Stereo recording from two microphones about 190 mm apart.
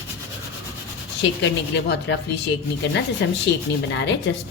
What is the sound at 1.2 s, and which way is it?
Speech, 65° left (ahead or behind).